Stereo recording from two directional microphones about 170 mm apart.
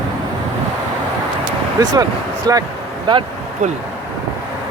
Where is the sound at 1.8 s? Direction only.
25° right (ahead or behind).